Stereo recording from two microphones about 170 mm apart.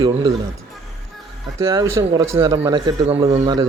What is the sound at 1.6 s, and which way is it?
Speech, 20° right (ahead or behind).